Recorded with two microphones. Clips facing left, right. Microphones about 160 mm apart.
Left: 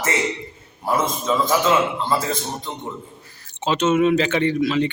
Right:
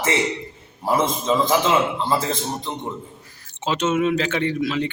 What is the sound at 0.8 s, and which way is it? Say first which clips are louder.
Speech: right 1 dB; 25° right (ahead or behind).